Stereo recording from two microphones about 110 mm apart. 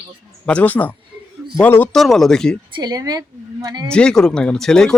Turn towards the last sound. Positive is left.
turn(degrees=5)  # may be behind; listen again after turning